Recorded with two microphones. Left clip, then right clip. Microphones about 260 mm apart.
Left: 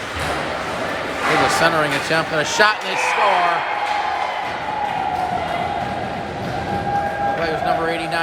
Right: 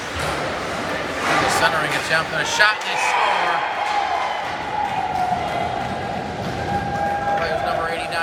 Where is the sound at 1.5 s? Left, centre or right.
Centre.